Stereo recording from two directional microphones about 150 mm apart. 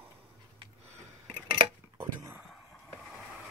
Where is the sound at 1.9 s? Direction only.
20° right (ahead or behind).